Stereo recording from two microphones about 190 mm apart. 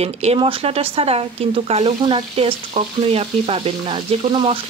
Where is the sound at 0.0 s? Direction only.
35° right (ahead or behind).